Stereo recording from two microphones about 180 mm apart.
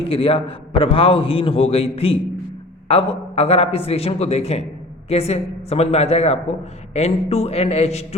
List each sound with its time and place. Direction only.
0.0 s a man's voice: 30° left (ahead or behind)